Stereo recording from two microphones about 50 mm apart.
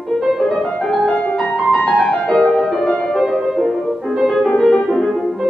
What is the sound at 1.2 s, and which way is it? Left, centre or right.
Music, left.